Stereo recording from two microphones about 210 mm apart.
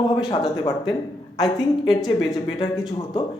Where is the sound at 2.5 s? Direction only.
25° left (ahead or behind).